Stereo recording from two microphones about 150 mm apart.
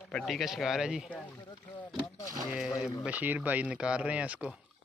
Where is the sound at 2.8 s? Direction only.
5° right (ahead or behind).